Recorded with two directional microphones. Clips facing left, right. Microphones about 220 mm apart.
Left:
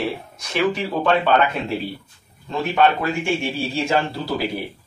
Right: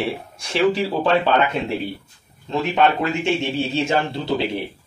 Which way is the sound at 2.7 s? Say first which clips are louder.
Left 1 dB; 20° right (ahead or behind).